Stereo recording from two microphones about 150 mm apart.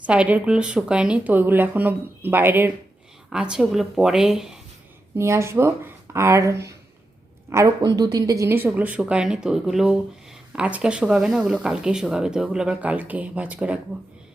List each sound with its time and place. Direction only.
0.0 s speech: 10° right (ahead or behind)
5.1 s speech: 20° right (ahead or behind)